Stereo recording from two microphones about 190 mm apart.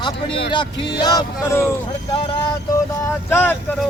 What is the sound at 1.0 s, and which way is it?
Music, 20° left (ahead or behind).